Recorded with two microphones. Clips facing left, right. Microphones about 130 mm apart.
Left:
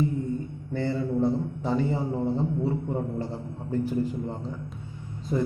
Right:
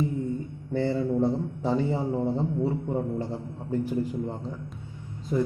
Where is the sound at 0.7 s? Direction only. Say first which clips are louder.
Right 2 dB; 25° right (ahead or behind).